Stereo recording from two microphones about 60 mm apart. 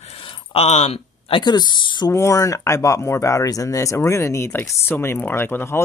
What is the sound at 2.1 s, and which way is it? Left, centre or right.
Speech, left.